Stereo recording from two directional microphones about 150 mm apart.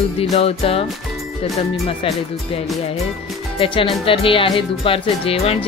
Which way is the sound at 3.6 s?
35° left (ahead or behind).